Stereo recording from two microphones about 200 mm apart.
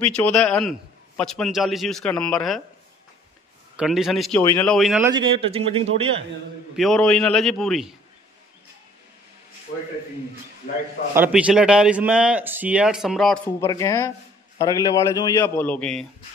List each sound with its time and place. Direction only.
0.1 s a man's voice: 5° left (ahead or behind)
3.7 s a man's voice: centre (ahead or behind)
5.0 s speech: 25° right (ahead or behind)
6.8 s a man's voice: 5° left (ahead or behind)
11.1 s a man's voice: 10° right (ahead or behind)
13.7 s a man's voice: 15° left (ahead or behind)